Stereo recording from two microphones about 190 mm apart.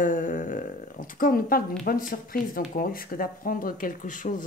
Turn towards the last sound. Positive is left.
turn(degrees=45)  # may be behind; listen again after turning